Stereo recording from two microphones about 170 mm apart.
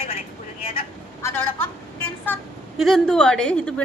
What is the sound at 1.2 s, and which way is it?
Speech, 15° left (ahead or behind).